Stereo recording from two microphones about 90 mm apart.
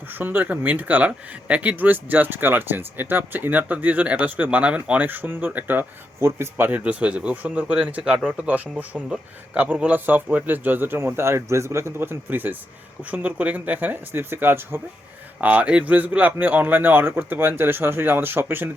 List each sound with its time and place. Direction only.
0.1 s speech: 20° right (ahead or behind)
6.7 s speech: 15° right (ahead or behind)